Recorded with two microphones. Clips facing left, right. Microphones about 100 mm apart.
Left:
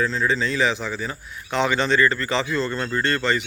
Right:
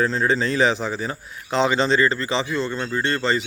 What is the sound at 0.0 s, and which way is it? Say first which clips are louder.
A man's voice: right 2 dB; 40° right (ahead or behind).